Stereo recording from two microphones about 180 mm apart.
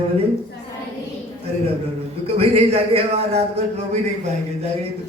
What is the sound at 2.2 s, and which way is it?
Speech, 35° right (ahead or behind).